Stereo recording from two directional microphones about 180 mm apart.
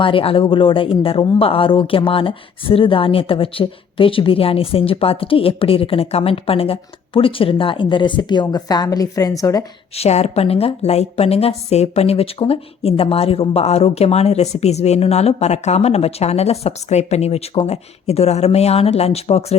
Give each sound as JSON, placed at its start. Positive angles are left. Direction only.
{"t": 0.0, "sound": "speech", "side_deg": 30}
{"t": 9.9, "sound": "a woman's voice", "side_deg": 35}